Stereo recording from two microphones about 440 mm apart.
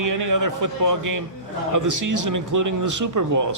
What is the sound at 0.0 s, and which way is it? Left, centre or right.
A man's voice, right.